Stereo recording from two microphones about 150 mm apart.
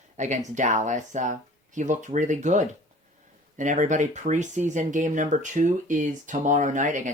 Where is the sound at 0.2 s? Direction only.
50° right (ahead or behind).